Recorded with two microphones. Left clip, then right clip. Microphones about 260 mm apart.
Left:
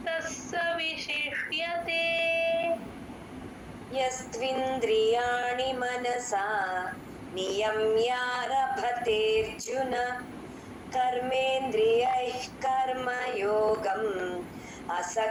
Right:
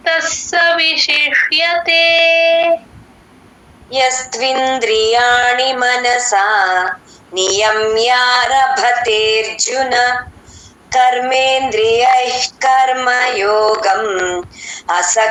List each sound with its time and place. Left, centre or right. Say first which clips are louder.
0.0 s female singing: right 17 dB; right
3.9 s female singing: right 16 dB; right